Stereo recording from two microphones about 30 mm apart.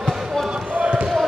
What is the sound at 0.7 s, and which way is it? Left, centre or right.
Basketball bounce, right.